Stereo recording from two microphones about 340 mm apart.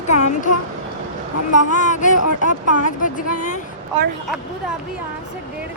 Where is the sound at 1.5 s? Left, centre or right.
Left.